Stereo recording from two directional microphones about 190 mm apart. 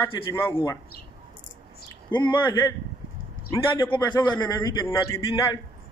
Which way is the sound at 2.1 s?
25° left (ahead or behind).